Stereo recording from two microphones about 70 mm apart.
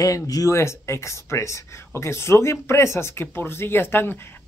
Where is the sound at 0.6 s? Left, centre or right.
Left.